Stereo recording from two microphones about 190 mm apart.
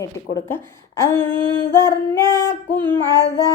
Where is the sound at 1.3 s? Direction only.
25° right (ahead or behind).